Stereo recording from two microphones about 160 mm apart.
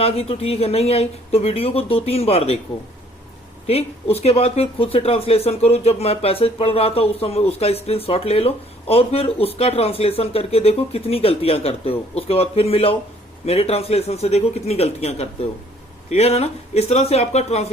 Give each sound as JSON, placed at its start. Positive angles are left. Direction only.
{"t": 0.0, "sound": "speech", "side_deg": 40}
{"t": 3.7, "sound": "speech", "side_deg": 40}